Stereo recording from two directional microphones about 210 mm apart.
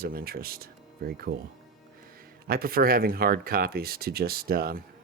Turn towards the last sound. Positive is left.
turn(degrees=-45)  # may be behind; listen again after turning